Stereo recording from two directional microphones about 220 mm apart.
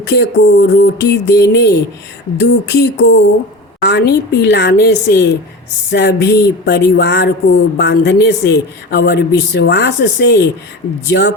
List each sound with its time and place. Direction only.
0.0 s a woman's voice: 50° left (ahead or behind)